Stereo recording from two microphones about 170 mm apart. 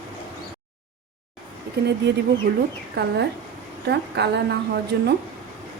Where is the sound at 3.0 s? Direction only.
75° right (ahead or behind).